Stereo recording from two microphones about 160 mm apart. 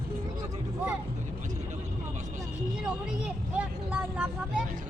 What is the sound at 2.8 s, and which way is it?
Vehicle, 5° right (ahead or behind).